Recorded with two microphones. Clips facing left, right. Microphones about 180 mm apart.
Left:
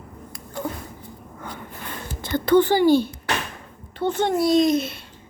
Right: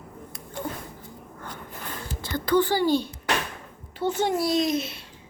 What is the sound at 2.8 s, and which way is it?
Speech, 10° left (ahead or behind).